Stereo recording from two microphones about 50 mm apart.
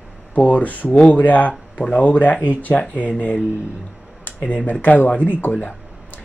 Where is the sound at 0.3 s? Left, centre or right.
Left.